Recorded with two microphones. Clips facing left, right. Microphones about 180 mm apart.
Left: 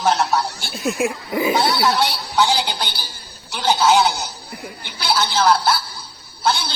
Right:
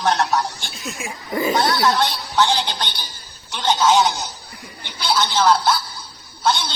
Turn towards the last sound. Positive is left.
turn(degrees=10)  # may be behind; listen again after turning